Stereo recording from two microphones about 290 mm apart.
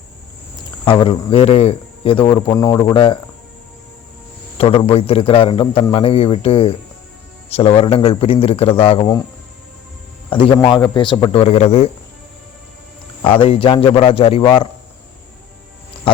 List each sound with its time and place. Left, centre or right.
0.9 s speech: centre
4.5 s a man's voice: centre
10.2 s speech: centre
13.4 s speech: centre